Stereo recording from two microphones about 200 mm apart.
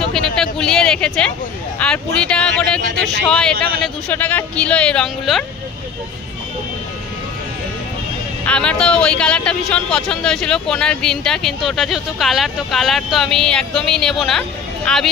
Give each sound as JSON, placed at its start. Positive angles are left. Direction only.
{"t": 0.1, "sound": "a sound", "side_deg": 5}
{"t": 1.8, "sound": "speech", "side_deg": 5}
{"t": 8.5, "sound": "speech", "side_deg": 5}